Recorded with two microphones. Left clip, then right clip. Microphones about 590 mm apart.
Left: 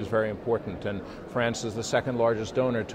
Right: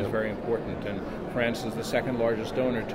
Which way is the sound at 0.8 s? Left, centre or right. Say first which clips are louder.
Right 1 dB; left.